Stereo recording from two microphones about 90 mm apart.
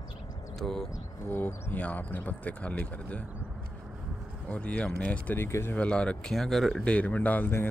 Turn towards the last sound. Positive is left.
turn(degrees=20)  # may be behind; listen again after turning